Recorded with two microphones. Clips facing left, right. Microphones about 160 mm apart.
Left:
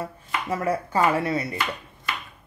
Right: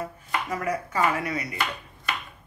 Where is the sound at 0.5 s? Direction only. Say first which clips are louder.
Left 6 dB; 30° left (ahead or behind).